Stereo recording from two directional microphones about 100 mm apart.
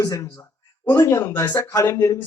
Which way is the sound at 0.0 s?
30° left (ahead or behind).